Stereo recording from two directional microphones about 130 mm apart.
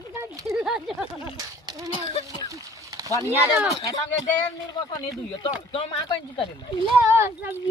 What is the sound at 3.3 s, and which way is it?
Speech, 15° right (ahead or behind).